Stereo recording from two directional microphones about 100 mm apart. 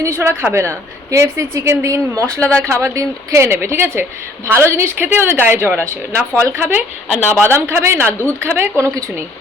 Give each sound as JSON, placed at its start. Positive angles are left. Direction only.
{"t": 0.2, "sound": "a woman's voice", "side_deg": -25}
{"t": 2.2, "sound": "speech", "side_deg": 10}
{"t": 2.6, "sound": "a woman's voice", "side_deg": -25}